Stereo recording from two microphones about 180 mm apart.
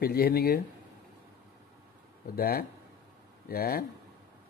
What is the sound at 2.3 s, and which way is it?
Speech, 60° left (ahead or behind).